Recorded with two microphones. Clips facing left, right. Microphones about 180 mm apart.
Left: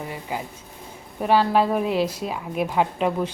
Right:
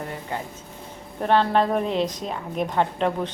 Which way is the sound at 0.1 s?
10° left (ahead or behind).